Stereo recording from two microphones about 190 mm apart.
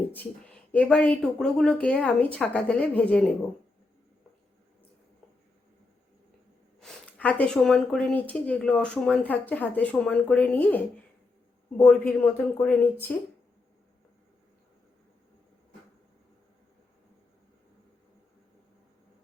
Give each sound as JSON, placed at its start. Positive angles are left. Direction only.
{"t": 0.1, "sound": "speech", "side_deg": 10}
{"t": 6.7, "sound": "speech", "side_deg": 5}